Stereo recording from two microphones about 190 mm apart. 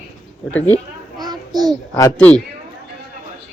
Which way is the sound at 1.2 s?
20° right (ahead or behind).